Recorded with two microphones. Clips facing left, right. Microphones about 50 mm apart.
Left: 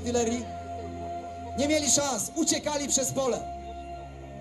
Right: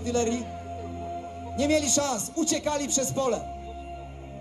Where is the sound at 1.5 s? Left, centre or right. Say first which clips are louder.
Right 2 dB; right.